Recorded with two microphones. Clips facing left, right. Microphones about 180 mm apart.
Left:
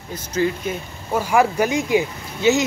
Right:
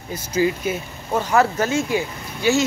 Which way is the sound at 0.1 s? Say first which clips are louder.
Right 1 dB; 10° right (ahead or behind).